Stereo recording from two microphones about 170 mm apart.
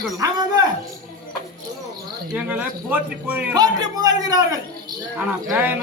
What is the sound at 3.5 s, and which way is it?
Speech, 25° right (ahead or behind).